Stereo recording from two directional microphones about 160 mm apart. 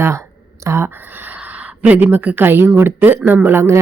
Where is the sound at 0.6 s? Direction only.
15° right (ahead or behind).